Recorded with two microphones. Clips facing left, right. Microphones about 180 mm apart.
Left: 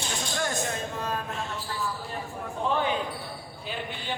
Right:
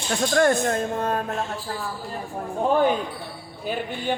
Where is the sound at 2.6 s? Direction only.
45° right (ahead or behind).